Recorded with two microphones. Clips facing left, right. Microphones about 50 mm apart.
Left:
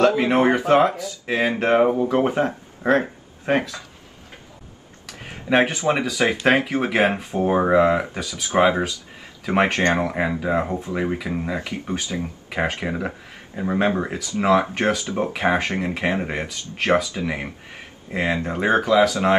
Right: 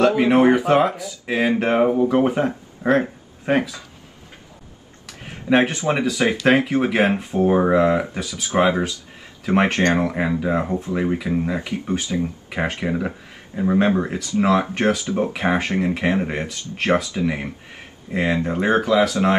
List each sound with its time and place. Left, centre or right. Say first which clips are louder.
0.2 s speech: right 3 dB; centre
5.2 s speech: right 1 dB; centre
9.5 s speech: right 1 dB; centre